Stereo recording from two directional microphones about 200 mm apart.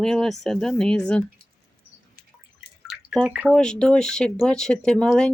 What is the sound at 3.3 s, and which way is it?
Speech, 5° right (ahead or behind).